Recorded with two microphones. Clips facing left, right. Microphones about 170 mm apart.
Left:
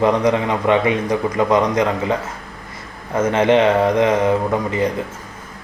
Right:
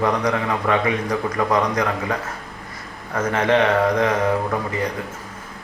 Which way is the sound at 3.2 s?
25° left (ahead or behind).